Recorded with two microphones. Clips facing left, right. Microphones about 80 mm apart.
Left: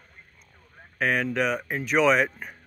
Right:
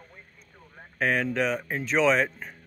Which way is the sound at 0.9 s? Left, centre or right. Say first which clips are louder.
Left 1 dB; centre.